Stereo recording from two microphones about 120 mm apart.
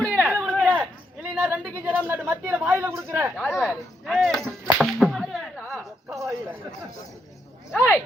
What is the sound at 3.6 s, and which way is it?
Speech, centre (ahead or behind).